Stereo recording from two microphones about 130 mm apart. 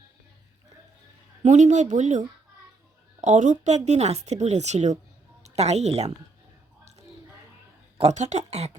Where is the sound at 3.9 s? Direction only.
55° right (ahead or behind).